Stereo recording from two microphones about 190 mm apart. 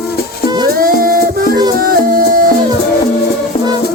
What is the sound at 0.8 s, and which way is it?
Music, 50° right (ahead or behind).